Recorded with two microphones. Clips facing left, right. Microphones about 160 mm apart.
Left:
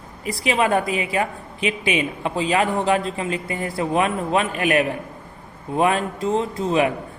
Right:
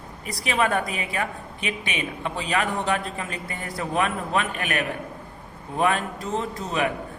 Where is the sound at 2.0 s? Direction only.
35° left (ahead or behind).